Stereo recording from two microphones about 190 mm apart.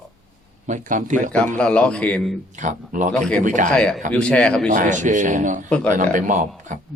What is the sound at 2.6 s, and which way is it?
Speech, 40° right (ahead or behind).